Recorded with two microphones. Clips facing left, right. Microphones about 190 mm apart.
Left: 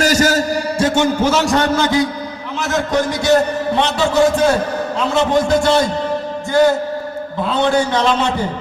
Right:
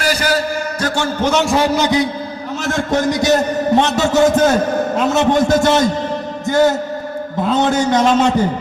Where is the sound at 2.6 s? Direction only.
50° right (ahead or behind).